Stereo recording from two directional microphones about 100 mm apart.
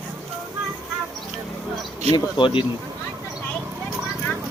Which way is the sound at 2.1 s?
55° left (ahead or behind).